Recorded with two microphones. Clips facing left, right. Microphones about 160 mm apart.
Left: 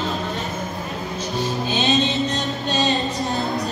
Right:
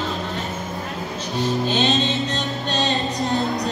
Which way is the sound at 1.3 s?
20° right (ahead or behind).